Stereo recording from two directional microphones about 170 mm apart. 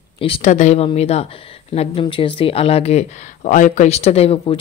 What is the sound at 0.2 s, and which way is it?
Speech, 35° left (ahead or behind).